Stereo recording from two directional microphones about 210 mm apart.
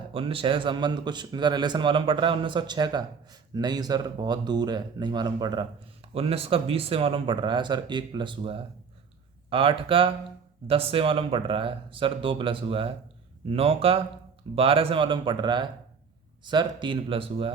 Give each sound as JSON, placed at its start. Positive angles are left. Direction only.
{"t": 0.1, "sound": "a man's voice", "side_deg": -25}